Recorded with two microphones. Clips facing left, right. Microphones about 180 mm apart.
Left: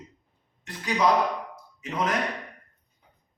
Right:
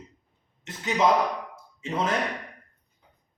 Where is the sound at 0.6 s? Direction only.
25° right (ahead or behind).